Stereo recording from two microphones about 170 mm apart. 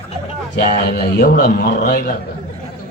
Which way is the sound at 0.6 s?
55° left (ahead or behind).